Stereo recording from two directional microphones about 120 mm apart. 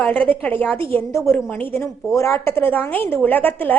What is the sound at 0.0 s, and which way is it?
A woman's voice, 15° left (ahead or behind).